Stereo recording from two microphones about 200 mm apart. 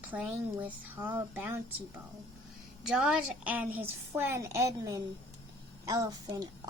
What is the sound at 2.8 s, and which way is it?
A child's voice, 5° right (ahead or behind).